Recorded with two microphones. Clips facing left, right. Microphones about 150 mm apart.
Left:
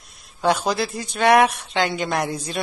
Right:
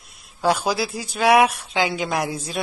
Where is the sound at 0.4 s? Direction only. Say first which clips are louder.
Even; 5° right (ahead or behind).